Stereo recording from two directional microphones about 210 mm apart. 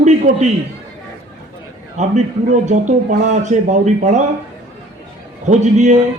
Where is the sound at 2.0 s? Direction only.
35° right (ahead or behind).